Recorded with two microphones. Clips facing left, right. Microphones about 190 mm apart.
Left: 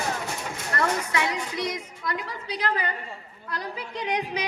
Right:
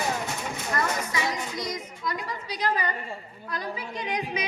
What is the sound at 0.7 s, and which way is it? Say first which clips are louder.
A woman's voice: left 3 dB; 65° left (ahead or behind).